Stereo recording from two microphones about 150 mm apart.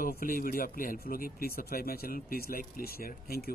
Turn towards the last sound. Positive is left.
turn(degrees=90)